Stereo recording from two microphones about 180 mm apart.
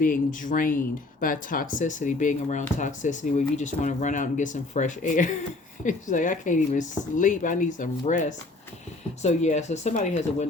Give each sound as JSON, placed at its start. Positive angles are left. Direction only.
{"t": 0.0, "sound": "speech", "side_deg": 45}